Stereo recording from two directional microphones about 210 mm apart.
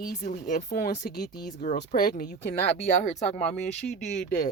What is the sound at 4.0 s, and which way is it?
Speech, 35° left (ahead or behind).